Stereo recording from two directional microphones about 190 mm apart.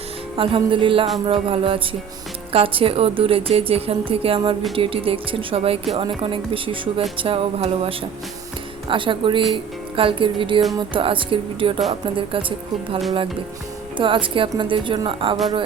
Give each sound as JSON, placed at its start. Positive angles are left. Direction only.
{"t": 0.3, "sound": "a woman's voice", "side_deg": -30}